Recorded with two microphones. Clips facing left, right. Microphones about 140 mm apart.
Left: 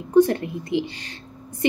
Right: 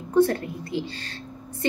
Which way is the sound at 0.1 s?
20° left (ahead or behind).